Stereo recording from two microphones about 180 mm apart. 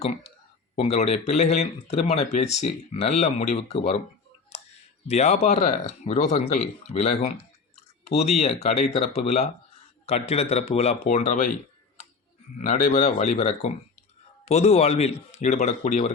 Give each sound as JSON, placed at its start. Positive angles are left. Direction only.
{"t": 0.0, "sound": "speech", "side_deg": 35}
{"t": 4.5, "sound": "clicking", "side_deg": 35}
{"t": 5.0, "sound": "speech", "side_deg": 35}
{"t": 12.5, "sound": "speech", "side_deg": 40}